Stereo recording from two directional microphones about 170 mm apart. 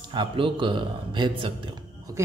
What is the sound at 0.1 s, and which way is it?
Speech, 25° right (ahead or behind).